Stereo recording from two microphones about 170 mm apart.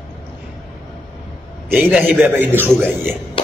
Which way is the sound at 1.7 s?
10° right (ahead or behind).